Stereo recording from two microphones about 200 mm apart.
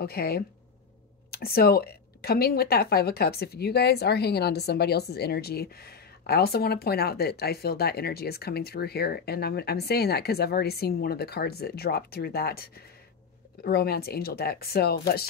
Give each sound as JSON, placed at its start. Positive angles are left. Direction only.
{"t": 0.0, "sound": "a woman's voice", "side_deg": 50}